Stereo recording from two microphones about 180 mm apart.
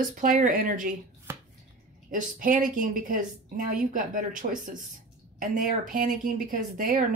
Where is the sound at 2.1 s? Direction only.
50° right (ahead or behind).